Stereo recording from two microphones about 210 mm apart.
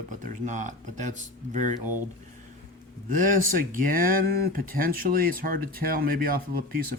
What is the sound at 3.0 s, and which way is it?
Speech, 40° right (ahead or behind).